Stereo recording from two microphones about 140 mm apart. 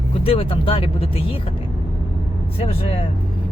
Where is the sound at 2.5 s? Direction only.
45° left (ahead or behind).